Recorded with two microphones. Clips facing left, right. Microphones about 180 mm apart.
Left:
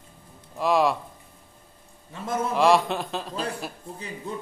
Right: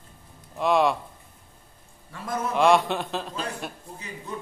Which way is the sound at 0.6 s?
Centre (ahead or behind).